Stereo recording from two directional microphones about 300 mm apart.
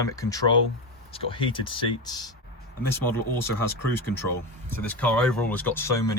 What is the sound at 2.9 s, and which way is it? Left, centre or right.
Speech, centre.